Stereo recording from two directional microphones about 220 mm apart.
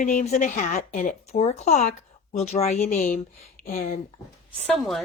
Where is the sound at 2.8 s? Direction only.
40° left (ahead or behind).